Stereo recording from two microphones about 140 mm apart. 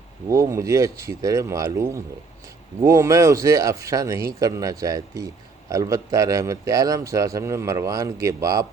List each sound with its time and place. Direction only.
0.3 s speech: 25° right (ahead or behind)